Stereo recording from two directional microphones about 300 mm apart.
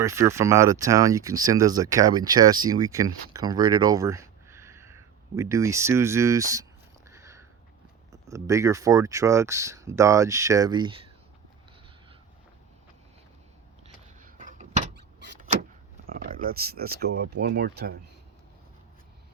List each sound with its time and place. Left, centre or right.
0.0 s speech: centre
3.3 s a sound: centre
8.1 s speech: centre
13.8 s vehicle: right
16.0 s speech: right